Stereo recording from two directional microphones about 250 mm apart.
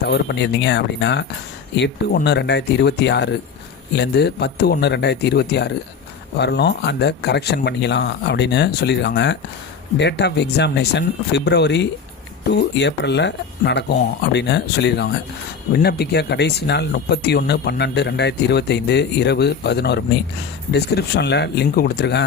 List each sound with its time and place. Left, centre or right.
0.0 s speech: left